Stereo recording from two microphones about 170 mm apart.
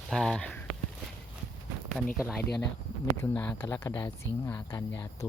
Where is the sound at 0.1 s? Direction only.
Centre (ahead or behind).